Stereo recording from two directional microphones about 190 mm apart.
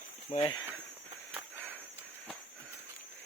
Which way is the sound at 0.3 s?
35° left (ahead or behind).